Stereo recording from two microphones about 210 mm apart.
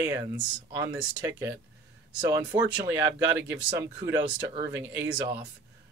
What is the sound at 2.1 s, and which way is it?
Speech, 5° right (ahead or behind).